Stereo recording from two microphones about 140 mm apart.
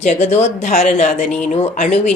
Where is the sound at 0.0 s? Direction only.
55° left (ahead or behind).